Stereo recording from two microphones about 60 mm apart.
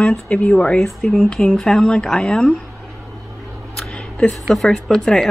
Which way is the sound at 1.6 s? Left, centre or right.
Centre.